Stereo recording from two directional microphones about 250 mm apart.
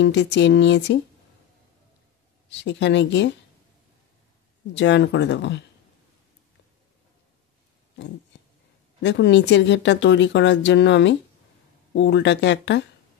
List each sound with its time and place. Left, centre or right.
0.0 s speech: left
2.5 s speech: left
4.7 s speech: left
9.0 s speech: left